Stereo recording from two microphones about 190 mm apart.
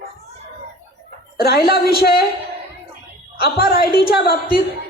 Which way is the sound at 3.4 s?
55° left (ahead or behind).